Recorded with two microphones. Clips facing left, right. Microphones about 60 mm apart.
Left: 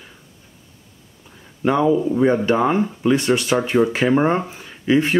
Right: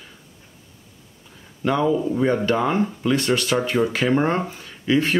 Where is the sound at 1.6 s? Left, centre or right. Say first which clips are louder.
Left 3 dB; centre.